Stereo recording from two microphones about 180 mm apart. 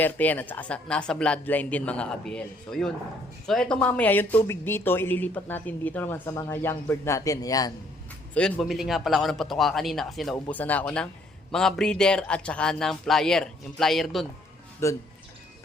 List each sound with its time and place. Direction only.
0.0 s speech: 10° left (ahead or behind)
8.3 s speech: 5° left (ahead or behind)
10.3 s speech: 10° left (ahead or behind)
14.8 s speech: 15° left (ahead or behind)